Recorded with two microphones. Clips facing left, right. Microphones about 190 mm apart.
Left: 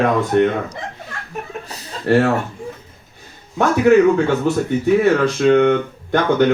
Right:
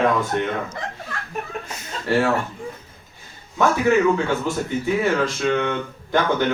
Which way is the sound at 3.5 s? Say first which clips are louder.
Left 5 dB; 60° left (ahead or behind).